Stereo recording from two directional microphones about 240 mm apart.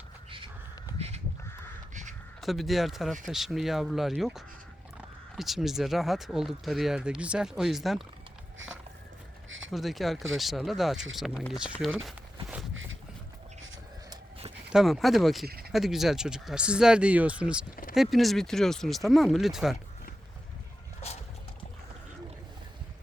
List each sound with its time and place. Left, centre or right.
0.3 s a sound: right
0.9 s crow: right
2.4 s speech: centre
9.7 s speech: centre
12.7 s boat: right
14.1 s a sound: right
14.7 s speech: centre
15.4 s a sound: right
15.7 s speech: centre